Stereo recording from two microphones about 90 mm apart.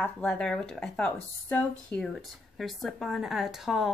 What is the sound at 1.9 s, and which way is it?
Speech, centre (ahead or behind).